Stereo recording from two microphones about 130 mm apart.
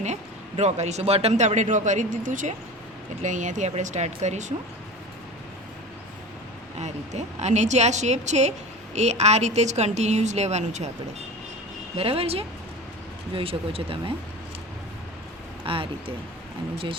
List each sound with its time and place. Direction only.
0.0 s a man's voice: 60° right (ahead or behind); by 2.6 s 80° right
3.2 s a man's voice: 70° right (ahead or behind)
6.7 s a man's voice: 60° right (ahead or behind)
11.9 s speech: 45° right (ahead or behind)
15.6 s speech: 45° right (ahead or behind)